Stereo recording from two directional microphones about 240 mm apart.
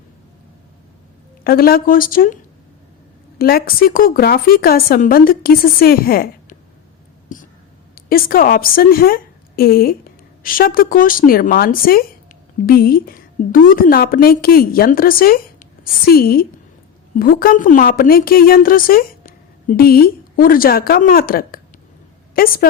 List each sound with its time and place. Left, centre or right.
1.5 s a woman's voice: left
7.9 s a woman's voice: left